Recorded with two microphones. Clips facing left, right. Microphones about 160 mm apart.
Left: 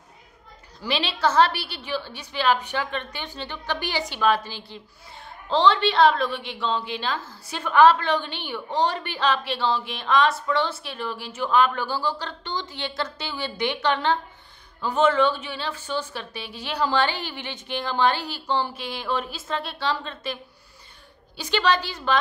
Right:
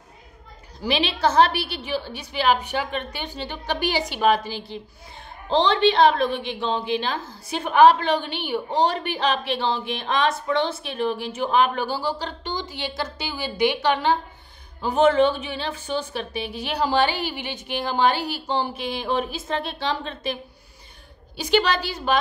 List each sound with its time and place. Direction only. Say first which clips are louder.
0.7 s speech: right 3 dB; 15° right (ahead or behind)
21.4 s speech: right 2 dB; 15° right (ahead or behind)